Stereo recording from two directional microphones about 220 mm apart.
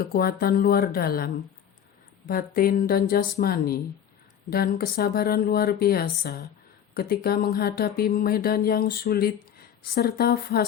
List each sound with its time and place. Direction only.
0.0 s speech: 45° left (ahead or behind)